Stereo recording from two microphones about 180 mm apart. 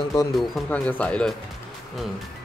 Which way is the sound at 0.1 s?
20° left (ahead or behind).